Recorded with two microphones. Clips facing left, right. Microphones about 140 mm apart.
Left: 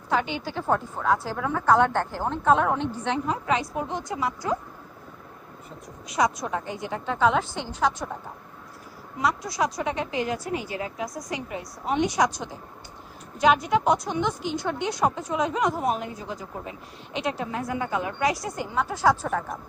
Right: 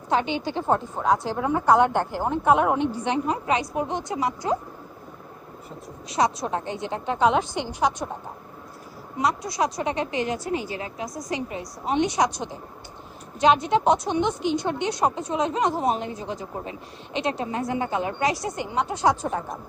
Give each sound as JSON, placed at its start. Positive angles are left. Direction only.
{"t": 0.1, "sound": "a woman's voice", "side_deg": -20}
{"t": 6.1, "sound": "a woman's voice", "side_deg": -25}
{"t": 9.1, "sound": "a woman's voice", "side_deg": -20}